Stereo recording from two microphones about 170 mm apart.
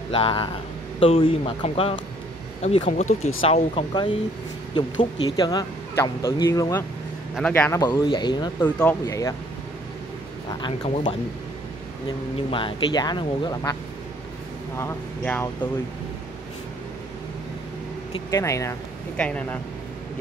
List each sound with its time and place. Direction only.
0.1 s a man's voice: 30° left (ahead or behind)
7.3 s a man's voice: 10° left (ahead or behind)
7.8 s speech: 25° left (ahead or behind)
8.5 s a man's voice: 10° left (ahead or behind)
12.4 s speech: 30° left (ahead or behind)
14.8 s a man's voice: 15° left (ahead or behind)
18.3 s a man's voice: 20° left (ahead or behind)